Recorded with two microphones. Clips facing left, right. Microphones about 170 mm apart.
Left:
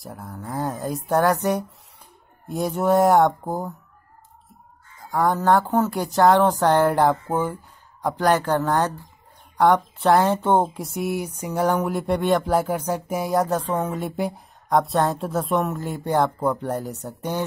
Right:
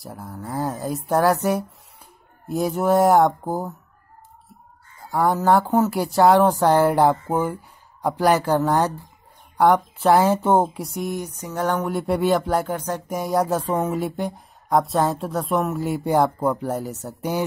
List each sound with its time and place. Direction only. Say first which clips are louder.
0.0 s speech: right 1 dB; centre (ahead or behind)
5.1 s speech: right 1 dB; 5° right (ahead or behind)